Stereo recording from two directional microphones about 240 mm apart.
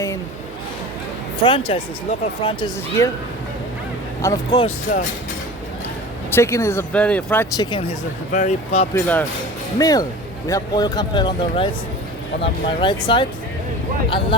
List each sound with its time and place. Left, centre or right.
1.4 s speech: left
4.2 s speech: centre
4.6 s speech: left
6.3 s speech: centre; by 8.9 s left
9.0 s speech: centre